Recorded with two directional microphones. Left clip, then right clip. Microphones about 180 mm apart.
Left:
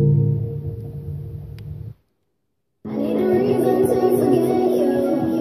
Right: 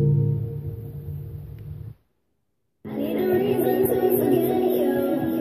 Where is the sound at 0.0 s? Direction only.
35° left (ahead or behind).